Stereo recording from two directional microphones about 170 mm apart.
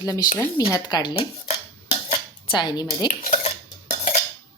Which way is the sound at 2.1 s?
25° left (ahead or behind).